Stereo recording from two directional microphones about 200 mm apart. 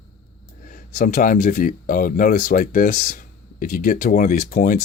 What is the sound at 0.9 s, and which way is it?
Speech, 45° left (ahead or behind).